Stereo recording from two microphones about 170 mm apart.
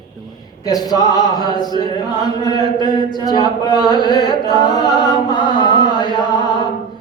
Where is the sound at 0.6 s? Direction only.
20° left (ahead or behind).